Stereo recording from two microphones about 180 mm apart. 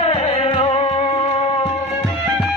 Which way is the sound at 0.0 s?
35° left (ahead or behind).